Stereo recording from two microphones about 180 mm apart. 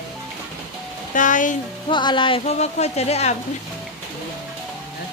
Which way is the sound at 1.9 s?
25° left (ahead or behind).